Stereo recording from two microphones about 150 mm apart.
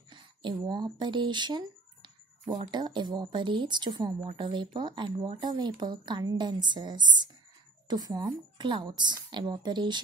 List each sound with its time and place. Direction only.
0.1 s a woman's voice: 30° right (ahead or behind)